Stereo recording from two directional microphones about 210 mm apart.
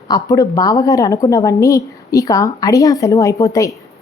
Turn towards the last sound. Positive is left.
turn(degrees=15)  # may be behind; listen again after turning